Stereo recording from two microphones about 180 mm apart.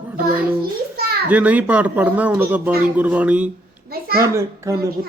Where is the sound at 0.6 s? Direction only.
60° right (ahead or behind).